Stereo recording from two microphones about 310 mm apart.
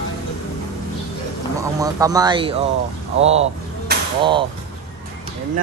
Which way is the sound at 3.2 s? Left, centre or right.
Centre.